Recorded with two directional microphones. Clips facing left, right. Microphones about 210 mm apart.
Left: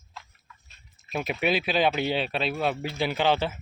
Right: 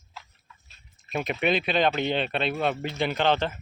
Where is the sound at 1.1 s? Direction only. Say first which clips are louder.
Right 1 dB; centre (ahead or behind).